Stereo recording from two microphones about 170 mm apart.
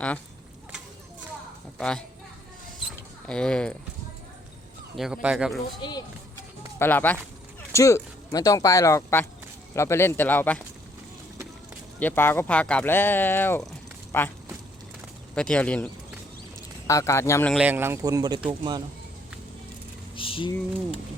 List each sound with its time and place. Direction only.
1.8 s speech: 5° left (ahead or behind)
3.2 s speech: 5° left (ahead or behind)
4.9 s speech: 5° right (ahead or behind)
6.7 s speech: 10° left (ahead or behind)
11.9 s speech: 10° left (ahead or behind)
15.4 s speech: 5° left (ahead or behind)
16.8 s speech: 15° left (ahead or behind)
17.5 s speech: 10° right (ahead or behind); by 18.4 s 25° right (ahead or behind)
20.1 s a sound: 30° left (ahead or behind)